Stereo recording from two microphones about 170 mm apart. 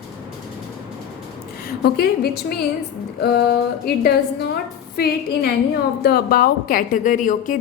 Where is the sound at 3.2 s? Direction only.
70° left (ahead or behind).